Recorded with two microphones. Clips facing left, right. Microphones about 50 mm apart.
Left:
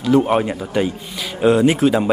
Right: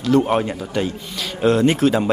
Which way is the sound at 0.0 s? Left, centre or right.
Centre.